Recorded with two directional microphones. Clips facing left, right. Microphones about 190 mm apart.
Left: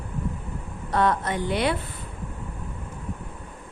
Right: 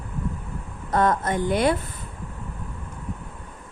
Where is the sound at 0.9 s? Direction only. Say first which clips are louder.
Right 2 dB; 45° right (ahead or behind).